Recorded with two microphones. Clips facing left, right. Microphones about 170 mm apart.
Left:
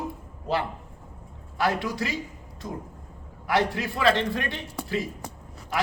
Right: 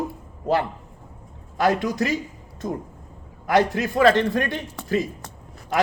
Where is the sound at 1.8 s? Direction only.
45° right (ahead or behind).